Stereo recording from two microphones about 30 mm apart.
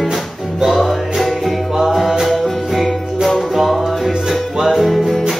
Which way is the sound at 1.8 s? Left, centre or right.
Centre.